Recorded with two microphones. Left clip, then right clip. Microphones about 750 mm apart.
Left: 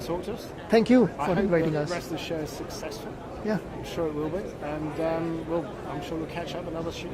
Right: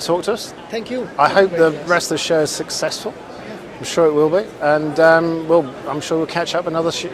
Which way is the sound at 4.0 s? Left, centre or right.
Right.